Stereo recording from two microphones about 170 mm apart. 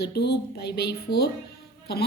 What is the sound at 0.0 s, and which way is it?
Speech, 75° left (ahead or behind).